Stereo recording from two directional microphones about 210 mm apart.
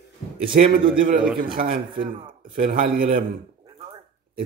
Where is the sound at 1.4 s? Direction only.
45° right (ahead or behind).